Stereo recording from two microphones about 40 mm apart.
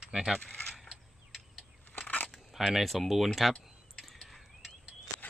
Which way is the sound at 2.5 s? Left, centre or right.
Centre.